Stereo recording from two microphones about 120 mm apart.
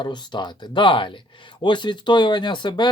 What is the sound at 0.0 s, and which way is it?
Speech, 40° left (ahead or behind).